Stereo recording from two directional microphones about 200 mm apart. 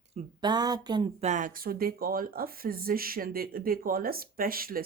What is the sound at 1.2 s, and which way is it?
Speech, 40° right (ahead or behind).